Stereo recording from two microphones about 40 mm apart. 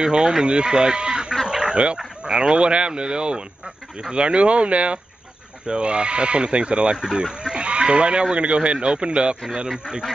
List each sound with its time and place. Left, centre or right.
0.0 s speech: centre
1.4 s fowl: centre
2.0 s speech: right